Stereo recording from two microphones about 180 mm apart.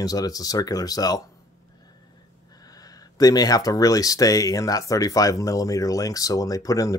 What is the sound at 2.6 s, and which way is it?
Speech, 20° left (ahead or behind).